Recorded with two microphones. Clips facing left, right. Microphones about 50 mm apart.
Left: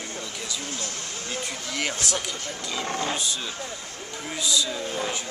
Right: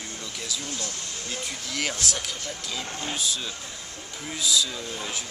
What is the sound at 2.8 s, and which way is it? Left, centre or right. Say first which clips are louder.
Speech: left 8 dB; left.